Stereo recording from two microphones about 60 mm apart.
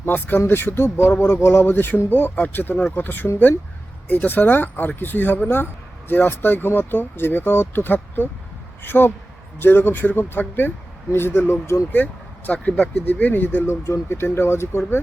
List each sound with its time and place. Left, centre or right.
0.0 s speech: left
1.6 s speech: left
12.5 s speech: left
13.8 s speech: left
14.2 s speech: left